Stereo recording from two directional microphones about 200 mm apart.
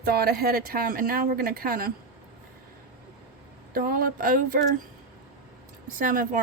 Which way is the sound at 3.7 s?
45° right (ahead or behind).